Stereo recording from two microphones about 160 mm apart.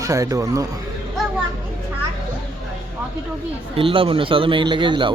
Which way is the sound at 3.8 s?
35° right (ahead or behind).